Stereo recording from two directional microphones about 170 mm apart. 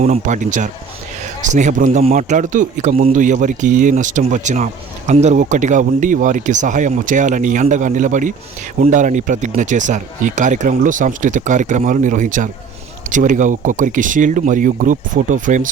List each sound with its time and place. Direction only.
0.0 s a man's voice: 40° right (ahead or behind)